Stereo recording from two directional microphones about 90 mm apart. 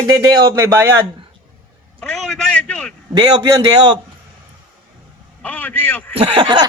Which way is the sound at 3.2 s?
50° right (ahead or behind).